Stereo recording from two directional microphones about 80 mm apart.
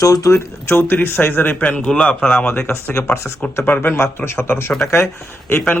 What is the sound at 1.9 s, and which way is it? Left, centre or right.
Speech, centre.